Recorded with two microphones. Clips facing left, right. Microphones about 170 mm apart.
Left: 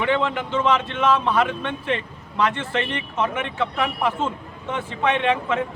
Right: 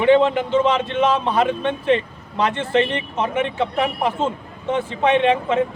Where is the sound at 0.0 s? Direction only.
25° right (ahead or behind).